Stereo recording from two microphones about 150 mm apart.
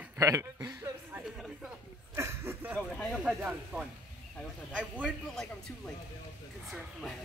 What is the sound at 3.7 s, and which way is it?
Speech, 15° right (ahead or behind).